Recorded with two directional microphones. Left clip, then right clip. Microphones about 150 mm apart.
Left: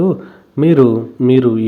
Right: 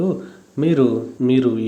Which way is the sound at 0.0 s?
30° left (ahead or behind).